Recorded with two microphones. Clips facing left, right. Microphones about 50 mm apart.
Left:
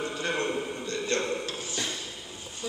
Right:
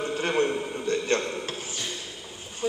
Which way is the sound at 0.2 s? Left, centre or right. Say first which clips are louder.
Right 5 dB; right.